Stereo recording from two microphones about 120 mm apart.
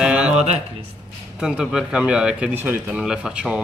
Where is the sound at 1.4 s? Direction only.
5° right (ahead or behind).